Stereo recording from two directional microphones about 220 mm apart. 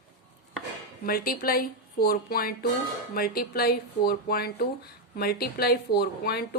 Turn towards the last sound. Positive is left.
turn(degrees=45)  # may be behind; listen again after turning